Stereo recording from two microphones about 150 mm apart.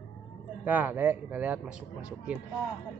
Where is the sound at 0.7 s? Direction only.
10° right (ahead or behind).